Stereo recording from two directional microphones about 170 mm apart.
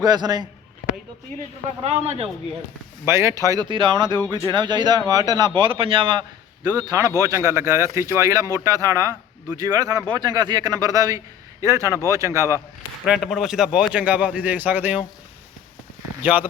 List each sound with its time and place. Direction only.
0.0 s speech: 25° right (ahead or behind)
1.8 s speech: 40° right (ahead or behind)
3.1 s a man's voice: 15° right (ahead or behind)
13.1 s a man's voice: centre (ahead or behind)
16.2 s a man's voice: 10° right (ahead or behind)